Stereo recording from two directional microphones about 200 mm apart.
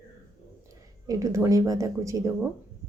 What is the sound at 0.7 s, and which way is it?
Speech, 15° right (ahead or behind).